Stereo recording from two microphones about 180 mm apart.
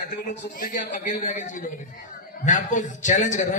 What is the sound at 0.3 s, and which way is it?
A man's voice, 50° left (ahead or behind).